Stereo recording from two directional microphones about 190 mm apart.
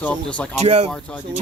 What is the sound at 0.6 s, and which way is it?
Speech, 35° right (ahead or behind).